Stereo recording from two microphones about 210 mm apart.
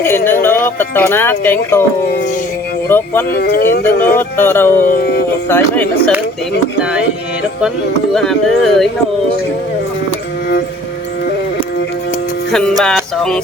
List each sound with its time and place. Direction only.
0.3 s speech: 10° left (ahead or behind)
2.9 s music: 10° left (ahead or behind)
3.3 s speech: 50° left (ahead or behind)
4.2 s music: 10° left (ahead or behind)
4.8 s speech: 45° left (ahead or behind)
5.5 s music: 10° left (ahead or behind)
8.1 s speech: centre (ahead or behind)
12.5 s music: 5° left (ahead or behind)